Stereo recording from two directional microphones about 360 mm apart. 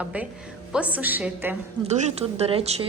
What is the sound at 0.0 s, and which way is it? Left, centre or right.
A woman's voice, centre.